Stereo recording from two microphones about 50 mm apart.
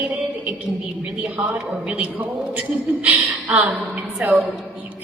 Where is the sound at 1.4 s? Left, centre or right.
Right.